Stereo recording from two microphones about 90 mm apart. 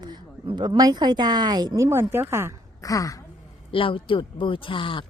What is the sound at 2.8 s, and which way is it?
Speech, 40° left (ahead or behind).